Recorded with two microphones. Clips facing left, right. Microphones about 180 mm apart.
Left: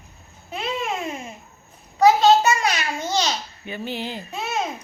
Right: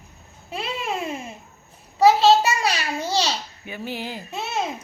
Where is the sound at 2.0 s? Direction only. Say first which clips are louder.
Even; 30° right (ahead or behind).